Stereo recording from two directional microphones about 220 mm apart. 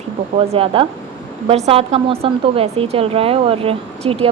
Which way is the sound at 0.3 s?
25° right (ahead or behind).